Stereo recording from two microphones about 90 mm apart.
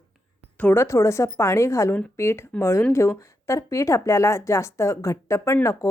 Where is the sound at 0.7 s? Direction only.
30° left (ahead or behind).